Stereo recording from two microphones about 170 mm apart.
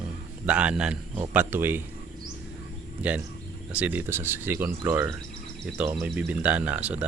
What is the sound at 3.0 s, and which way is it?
Speech, 10° right (ahead or behind).